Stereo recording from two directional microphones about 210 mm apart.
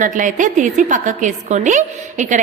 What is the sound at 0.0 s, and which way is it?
A woman's voice, 40° right (ahead or behind).